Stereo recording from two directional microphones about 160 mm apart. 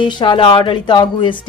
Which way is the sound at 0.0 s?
30° left (ahead or behind).